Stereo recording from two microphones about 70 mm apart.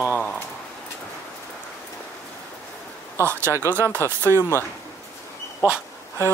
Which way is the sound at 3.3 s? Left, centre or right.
Right.